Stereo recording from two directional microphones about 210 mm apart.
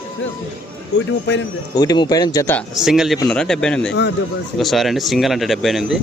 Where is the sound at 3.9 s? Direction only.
55° left (ahead or behind).